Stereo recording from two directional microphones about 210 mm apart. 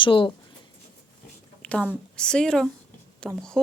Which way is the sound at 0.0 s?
25° left (ahead or behind).